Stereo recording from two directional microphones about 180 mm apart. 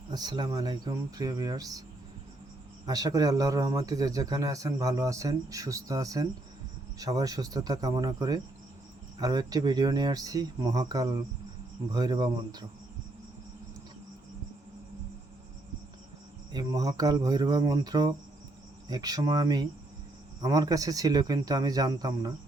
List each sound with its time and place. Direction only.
0.1 s a man's voice: 20° right (ahead or behind)
2.8 s a man's voice: 20° right (ahead or behind)
16.5 s a man's voice: 20° right (ahead or behind)